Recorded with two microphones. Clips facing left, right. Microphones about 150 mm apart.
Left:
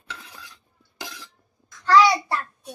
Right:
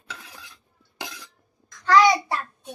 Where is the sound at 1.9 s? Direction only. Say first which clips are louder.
Even; 20° right (ahead or behind).